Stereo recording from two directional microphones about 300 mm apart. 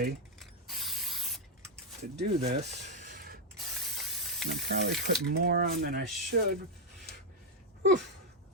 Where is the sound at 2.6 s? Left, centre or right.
Right.